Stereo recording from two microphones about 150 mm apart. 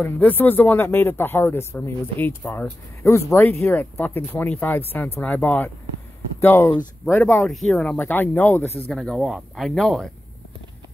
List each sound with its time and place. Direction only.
0.0 s speech: 10° left (ahead or behind)
8.9 s speech: centre (ahead or behind)